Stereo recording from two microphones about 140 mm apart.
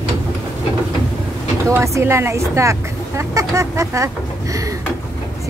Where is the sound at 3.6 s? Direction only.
20° right (ahead or behind).